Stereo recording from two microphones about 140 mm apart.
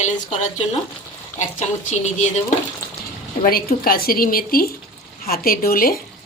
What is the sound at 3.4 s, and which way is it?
A woman's voice, 90° left.